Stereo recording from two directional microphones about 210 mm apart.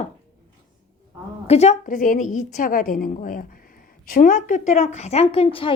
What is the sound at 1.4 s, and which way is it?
A woman's voice, 30° left (ahead or behind).